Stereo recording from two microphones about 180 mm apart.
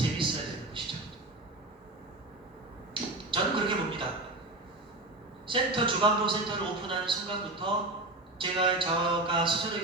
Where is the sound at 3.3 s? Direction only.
30° right (ahead or behind).